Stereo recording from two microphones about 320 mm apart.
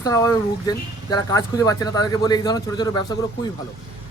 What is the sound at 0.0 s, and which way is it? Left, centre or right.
A man's voice, centre.